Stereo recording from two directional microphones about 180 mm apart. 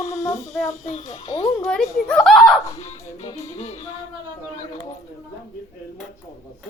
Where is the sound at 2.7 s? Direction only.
35° left (ahead or behind).